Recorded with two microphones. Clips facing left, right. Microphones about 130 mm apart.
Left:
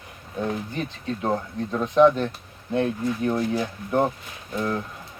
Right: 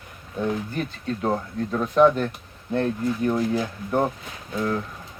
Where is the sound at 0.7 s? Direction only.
Centre (ahead or behind).